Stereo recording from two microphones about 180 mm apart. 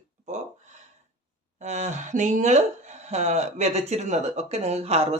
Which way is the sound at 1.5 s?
40° right (ahead or behind).